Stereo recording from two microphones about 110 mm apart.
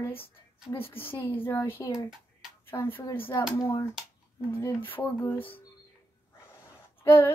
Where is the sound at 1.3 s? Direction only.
20° left (ahead or behind).